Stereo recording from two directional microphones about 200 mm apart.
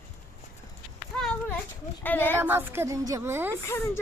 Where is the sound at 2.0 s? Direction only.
10° left (ahead or behind).